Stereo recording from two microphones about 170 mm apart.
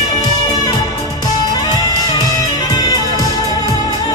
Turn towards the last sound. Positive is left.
turn(degrees=20)  # may be behind; listen again after turning